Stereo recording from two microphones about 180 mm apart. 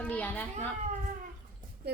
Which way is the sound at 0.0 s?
10° left (ahead or behind).